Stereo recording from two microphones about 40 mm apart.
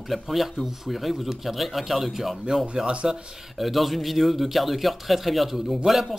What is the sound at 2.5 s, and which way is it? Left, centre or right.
Speech, centre.